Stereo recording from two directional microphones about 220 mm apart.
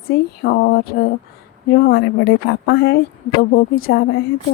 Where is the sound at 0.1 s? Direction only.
45° left (ahead or behind).